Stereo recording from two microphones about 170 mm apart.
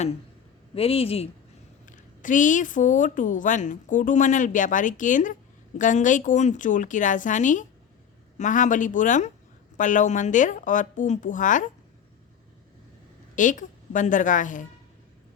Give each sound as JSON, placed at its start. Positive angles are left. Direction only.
{"t": 0.8, "sound": "speech", "side_deg": 35}
{"t": 1.9, "sound": "a woman's voice", "side_deg": 50}
{"t": 13.3, "sound": "a woman's voice", "side_deg": 50}